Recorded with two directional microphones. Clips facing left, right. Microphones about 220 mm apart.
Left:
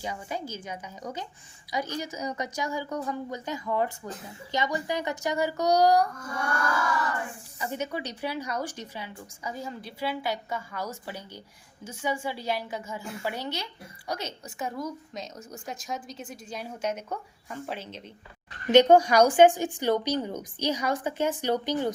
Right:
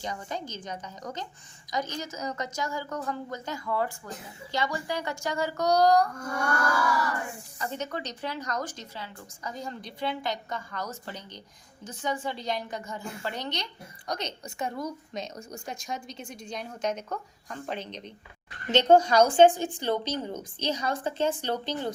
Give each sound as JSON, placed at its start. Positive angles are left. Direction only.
{"t": 0.0, "sound": "a woman's voice", "side_deg": 10}
{"t": 7.6, "sound": "a woman's voice", "side_deg": 10}